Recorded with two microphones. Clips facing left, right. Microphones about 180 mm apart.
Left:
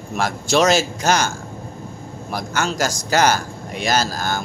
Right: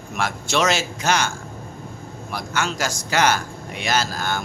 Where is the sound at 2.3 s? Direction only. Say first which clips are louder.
Left 3 dB; 40° left (ahead or behind).